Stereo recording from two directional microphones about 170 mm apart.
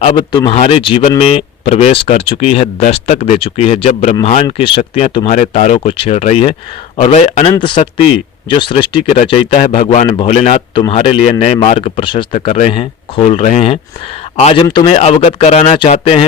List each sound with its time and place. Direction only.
0.0 s speech: 30° left (ahead or behind)
9.6 s a man's voice: 45° left (ahead or behind)
10.1 s speech: 30° left (ahead or behind)